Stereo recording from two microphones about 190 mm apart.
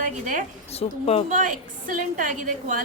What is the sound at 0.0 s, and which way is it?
Speech, 45° right (ahead or behind).